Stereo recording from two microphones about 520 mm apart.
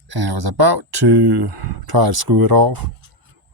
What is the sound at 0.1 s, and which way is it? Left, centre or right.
Speech, right.